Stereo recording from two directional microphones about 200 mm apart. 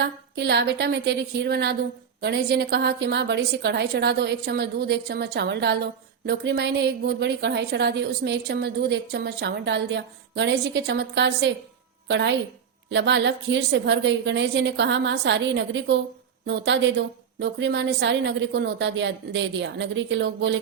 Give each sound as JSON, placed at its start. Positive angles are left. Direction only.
{"t": 0.0, "sound": "a woman's voice", "side_deg": -55}